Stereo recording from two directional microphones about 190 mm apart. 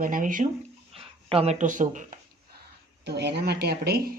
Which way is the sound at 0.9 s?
30° right (ahead or behind).